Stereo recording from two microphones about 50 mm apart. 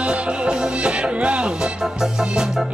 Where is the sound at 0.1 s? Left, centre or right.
Right.